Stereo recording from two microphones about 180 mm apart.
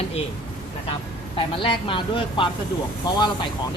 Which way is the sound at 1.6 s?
30° left (ahead or behind).